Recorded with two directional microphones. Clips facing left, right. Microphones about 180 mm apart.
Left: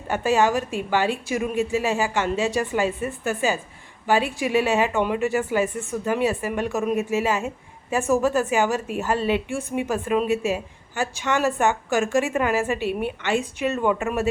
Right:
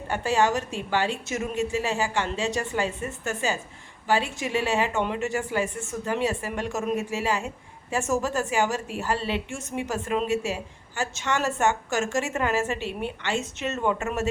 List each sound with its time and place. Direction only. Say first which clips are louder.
0.1 s a woman's voice: left 3 dB; 15° left (ahead or behind)
9.5 s a woman's voice: left 7 dB; 20° right (ahead or behind)
9.7 s a woman's voice: left 4 dB; 15° left (ahead or behind)